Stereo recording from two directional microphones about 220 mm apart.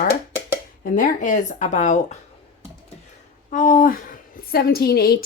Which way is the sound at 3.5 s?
35° left (ahead or behind).